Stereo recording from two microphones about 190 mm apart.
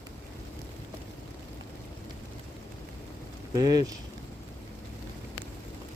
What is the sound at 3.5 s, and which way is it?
Speech, 20° right (ahead or behind).